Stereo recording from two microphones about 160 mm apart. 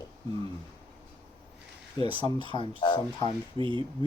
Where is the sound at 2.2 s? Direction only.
20° left (ahead or behind).